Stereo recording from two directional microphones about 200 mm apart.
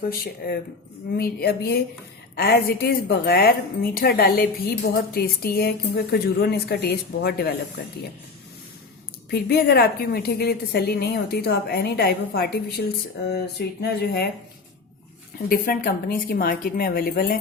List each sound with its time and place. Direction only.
0.1 s a woman's voice: 50° left (ahead or behind)
9.3 s a woman's voice: 55° left (ahead or behind)
15.4 s a woman's voice: 45° left (ahead or behind)